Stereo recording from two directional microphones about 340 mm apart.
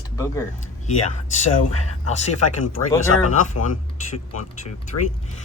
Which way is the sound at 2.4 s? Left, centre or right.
Left.